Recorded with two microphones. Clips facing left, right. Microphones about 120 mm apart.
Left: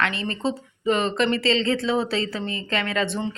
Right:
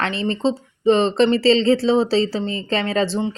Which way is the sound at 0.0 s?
30° right (ahead or behind).